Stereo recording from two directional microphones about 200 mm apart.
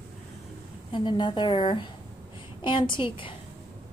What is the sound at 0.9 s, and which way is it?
A woman's voice, 25° left (ahead or behind).